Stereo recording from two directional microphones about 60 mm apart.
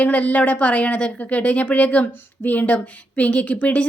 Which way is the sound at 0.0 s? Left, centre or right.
Left.